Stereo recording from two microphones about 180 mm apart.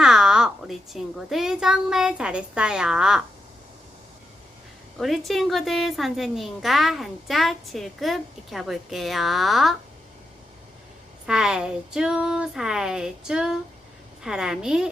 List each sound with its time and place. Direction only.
0.0 s a child's voice: 5° right (ahead or behind)
4.9 s a woman's voice: centre (ahead or behind)
11.3 s a woman's voice: 5° right (ahead or behind)